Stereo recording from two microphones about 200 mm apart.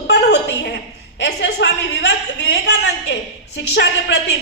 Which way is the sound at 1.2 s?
60° left (ahead or behind).